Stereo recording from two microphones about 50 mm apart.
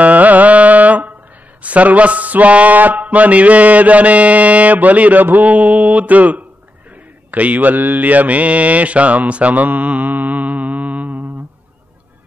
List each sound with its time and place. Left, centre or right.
0.0 s carnatic music: right
1.6 s speech: right
7.2 s mantra: right